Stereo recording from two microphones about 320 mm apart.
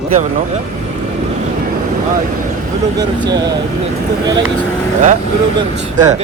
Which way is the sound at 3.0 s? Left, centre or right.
Centre.